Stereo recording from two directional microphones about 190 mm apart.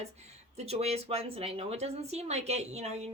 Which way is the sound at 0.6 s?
35° right (ahead or behind).